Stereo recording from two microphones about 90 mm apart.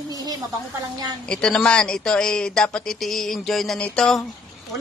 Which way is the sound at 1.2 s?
10° left (ahead or behind).